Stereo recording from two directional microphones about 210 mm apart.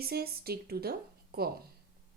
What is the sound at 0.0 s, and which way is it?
A woman's voice, 50° right (ahead or behind).